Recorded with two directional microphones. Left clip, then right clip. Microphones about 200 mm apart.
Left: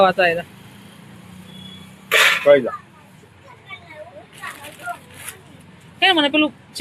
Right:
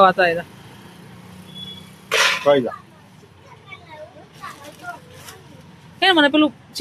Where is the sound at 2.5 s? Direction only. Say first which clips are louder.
Left 3 dB; 55° right (ahead or behind).